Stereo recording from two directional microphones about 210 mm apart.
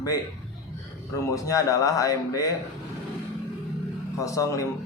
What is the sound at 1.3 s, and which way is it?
Speech, 15° left (ahead or behind).